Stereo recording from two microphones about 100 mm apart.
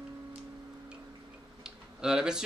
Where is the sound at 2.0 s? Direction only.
5° right (ahead or behind).